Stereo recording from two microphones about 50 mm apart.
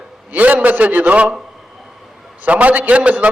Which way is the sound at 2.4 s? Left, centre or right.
Right.